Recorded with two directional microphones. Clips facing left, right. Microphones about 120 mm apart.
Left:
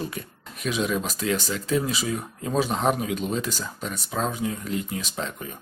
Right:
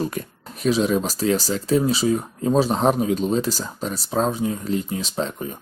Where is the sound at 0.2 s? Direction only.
40° right (ahead or behind).